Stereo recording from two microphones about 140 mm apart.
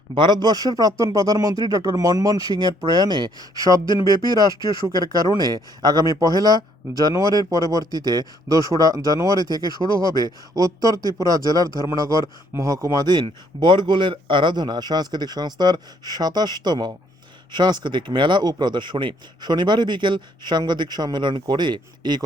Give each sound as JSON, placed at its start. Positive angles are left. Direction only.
{"t": 0.1, "sound": "speech", "side_deg": -30}
{"t": 5.5, "sound": "speech", "side_deg": -30}